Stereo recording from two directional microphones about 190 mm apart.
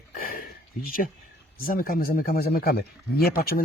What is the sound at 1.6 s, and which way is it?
Speech, 50° left (ahead or behind).